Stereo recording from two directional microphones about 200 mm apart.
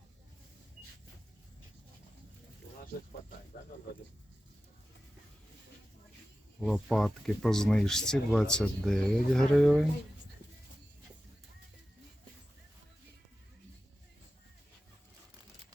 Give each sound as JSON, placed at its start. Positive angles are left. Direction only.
{"t": 6.6, "sound": "speech", "side_deg": 0}